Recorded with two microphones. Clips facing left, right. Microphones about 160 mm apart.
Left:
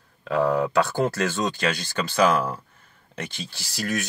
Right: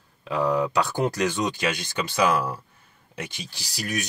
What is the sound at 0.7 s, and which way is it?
Speech, 15° right (ahead or behind).